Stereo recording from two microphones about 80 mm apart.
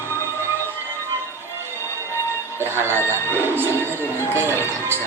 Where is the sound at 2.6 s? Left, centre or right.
Right.